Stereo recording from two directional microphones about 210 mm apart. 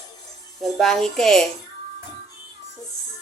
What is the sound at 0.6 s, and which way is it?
Speech, centre (ahead or behind).